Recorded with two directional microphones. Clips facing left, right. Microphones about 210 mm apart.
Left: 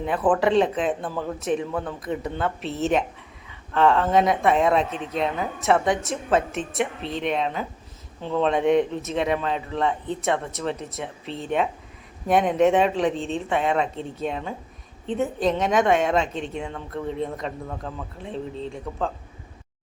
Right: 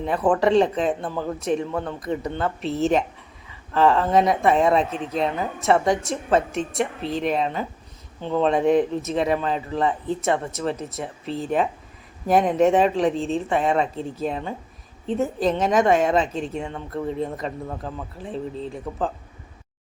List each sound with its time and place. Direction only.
0.0 s speech: centre (ahead or behind)